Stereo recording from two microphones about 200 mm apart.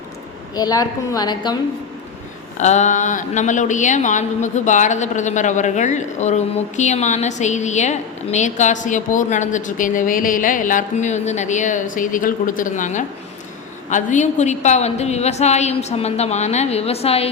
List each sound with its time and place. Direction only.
0.5 s a woman's voice: 20° left (ahead or behind)
2.6 s a woman's voice: 35° left (ahead or behind)